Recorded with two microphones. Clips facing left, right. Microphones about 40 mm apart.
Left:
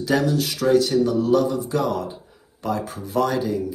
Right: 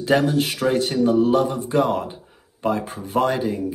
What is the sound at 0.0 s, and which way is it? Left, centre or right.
Speech, right.